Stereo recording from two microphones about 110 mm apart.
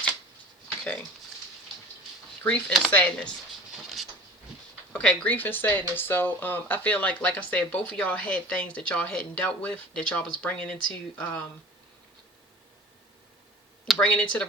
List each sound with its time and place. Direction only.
2.4 s speech: 15° left (ahead or behind)
3.7 s patter: centre (ahead or behind)
4.9 s speech: 10° left (ahead or behind)
14.0 s speech: 10° left (ahead or behind)